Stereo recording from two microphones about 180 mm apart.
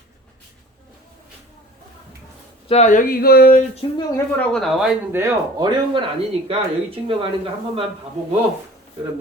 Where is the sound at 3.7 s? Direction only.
30° left (ahead or behind).